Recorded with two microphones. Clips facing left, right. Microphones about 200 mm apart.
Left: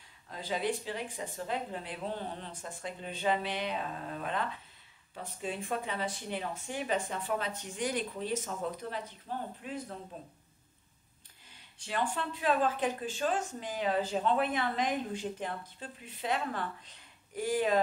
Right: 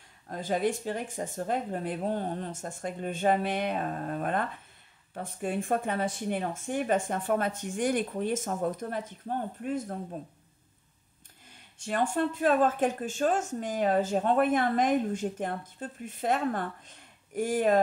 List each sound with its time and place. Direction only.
0.3 s speech: 50° right (ahead or behind)
11.8 s speech: 45° right (ahead or behind)